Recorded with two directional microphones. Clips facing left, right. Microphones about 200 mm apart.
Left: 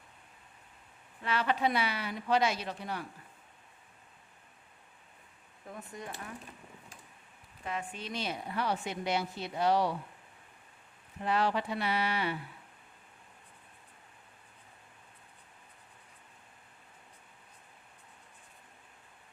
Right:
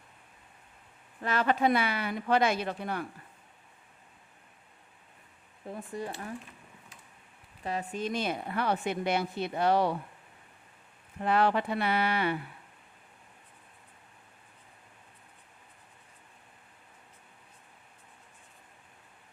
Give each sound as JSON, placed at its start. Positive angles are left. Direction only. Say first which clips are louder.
{"t": 1.2, "sound": "a woman's voice", "louder": "right 4 dB", "side_deg": -45}
{"t": 5.6, "sound": "speech", "louder": "right 6 dB", "side_deg": -30}
{"t": 7.6, "sound": "a woman's voice", "louder": "right 6 dB", "side_deg": -35}
{"t": 11.2, "sound": "a woman's voice", "louder": "right 4 dB", "side_deg": -55}